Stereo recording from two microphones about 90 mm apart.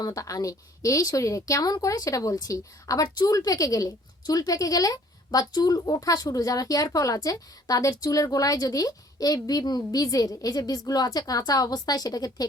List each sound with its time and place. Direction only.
0.0 s speech: 40° left (ahead or behind)